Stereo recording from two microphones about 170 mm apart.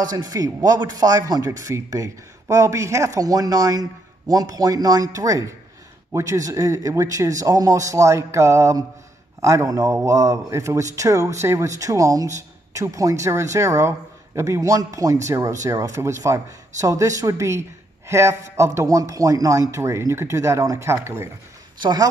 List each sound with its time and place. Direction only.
0.1 s a man's voice: 20° right (ahead or behind)